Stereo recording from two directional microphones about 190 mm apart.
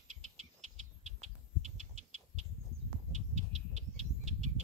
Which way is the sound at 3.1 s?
35° right (ahead or behind).